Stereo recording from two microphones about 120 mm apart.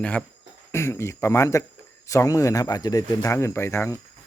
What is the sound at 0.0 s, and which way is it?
Speech, 10° left (ahead or behind).